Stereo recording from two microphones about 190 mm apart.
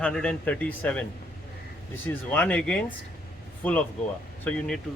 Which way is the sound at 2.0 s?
5° left (ahead or behind).